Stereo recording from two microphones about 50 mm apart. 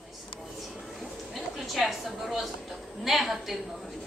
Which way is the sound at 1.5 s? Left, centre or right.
Centre.